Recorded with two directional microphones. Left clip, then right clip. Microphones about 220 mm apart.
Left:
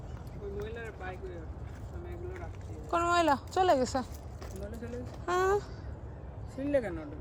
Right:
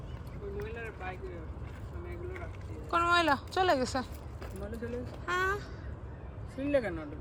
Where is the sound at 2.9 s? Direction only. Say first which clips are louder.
Even; 15° left (ahead or behind).